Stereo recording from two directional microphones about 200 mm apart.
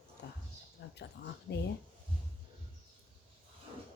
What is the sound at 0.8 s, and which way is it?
Speech, 60° left (ahead or behind).